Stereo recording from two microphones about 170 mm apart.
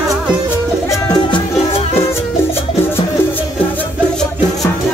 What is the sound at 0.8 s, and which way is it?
Music, 25° left (ahead or behind).